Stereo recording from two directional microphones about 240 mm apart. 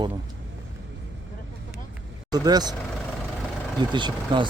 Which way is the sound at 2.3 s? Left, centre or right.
Centre.